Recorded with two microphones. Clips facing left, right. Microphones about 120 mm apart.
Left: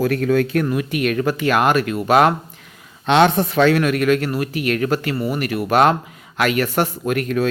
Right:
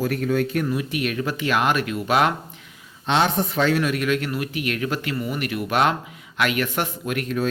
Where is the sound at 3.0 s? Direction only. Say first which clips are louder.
Left 6 dB; 65° left (ahead or behind); by 7.2 s 40° left (ahead or behind).